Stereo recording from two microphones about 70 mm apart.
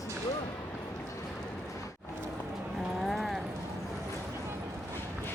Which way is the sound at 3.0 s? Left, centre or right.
Centre.